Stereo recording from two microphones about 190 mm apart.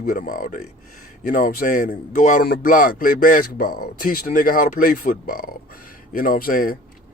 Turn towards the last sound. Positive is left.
turn(degrees=50)  # may be behind; listen again after turning